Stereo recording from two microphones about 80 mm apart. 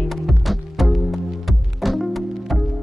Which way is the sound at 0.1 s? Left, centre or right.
Centre.